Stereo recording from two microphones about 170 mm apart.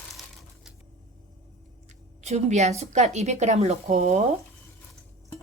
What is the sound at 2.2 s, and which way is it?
A woman's voice, 40° right (ahead or behind).